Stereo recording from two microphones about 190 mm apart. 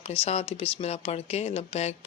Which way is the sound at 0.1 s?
30° left (ahead or behind).